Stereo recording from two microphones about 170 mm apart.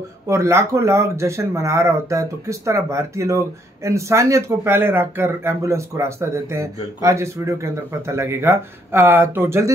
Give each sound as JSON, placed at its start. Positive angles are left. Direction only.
{"t": 0.3, "sound": "speech", "side_deg": -15}